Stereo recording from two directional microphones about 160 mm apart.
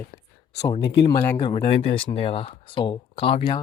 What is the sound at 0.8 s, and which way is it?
Speech, 90° left.